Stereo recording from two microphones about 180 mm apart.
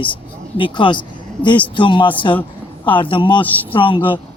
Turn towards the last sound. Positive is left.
turn(degrees=30)  # may be behind; listen again after turning